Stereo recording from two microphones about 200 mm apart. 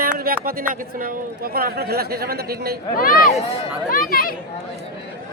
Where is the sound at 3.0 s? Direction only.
45° left (ahead or behind).